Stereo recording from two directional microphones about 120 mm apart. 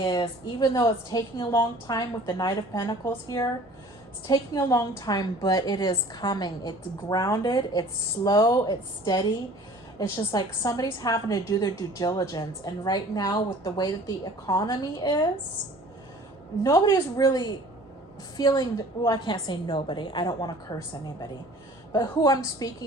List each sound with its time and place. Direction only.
0.0 s a woman's voice: 40° left (ahead or behind)
16.6 s a woman's voice: 30° left (ahead or behind)
21.9 s a woman's voice: 30° left (ahead or behind)